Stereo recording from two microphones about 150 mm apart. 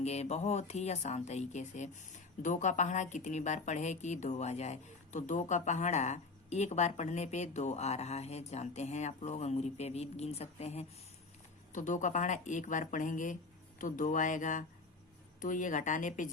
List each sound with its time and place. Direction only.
0.0 s speech: 45° left (ahead or behind)
11.7 s speech: 55° left (ahead or behind)